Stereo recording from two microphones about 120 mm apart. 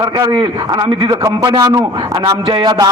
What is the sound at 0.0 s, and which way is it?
A man's voice, 35° right (ahead or behind).